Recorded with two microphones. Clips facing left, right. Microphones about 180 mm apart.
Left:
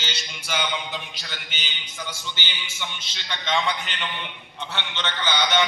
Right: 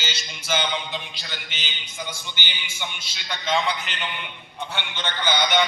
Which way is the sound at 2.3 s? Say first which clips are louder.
Even; 15° right (ahead or behind).